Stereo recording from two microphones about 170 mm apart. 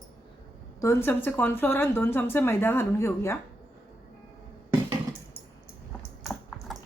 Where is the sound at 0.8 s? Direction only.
15° left (ahead or behind).